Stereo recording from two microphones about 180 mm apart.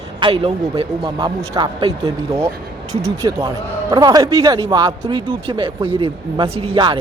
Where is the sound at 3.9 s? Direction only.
20° right (ahead or behind).